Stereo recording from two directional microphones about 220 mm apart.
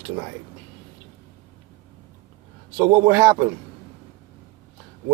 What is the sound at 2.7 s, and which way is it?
Speech, 15° right (ahead or behind).